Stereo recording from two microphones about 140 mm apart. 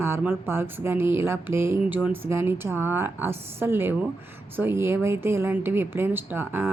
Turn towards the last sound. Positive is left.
turn(degrees=-15)  # may be behind; listen again after turning